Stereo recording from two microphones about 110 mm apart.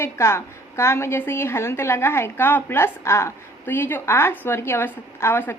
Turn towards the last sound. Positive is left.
turn(degrees=20)  # may be behind; listen again after turning